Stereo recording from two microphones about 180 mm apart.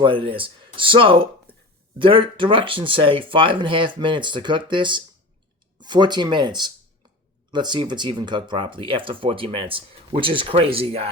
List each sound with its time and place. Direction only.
0.0 s speech: 30° right (ahead or behind)